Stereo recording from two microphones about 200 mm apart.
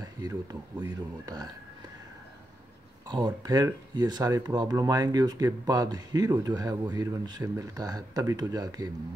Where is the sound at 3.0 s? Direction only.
20° right (ahead or behind).